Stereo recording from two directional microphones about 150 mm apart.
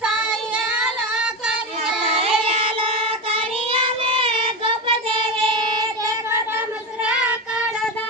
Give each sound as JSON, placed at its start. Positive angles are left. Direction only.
{"t": 2.1, "sound": "child singing", "side_deg": -40}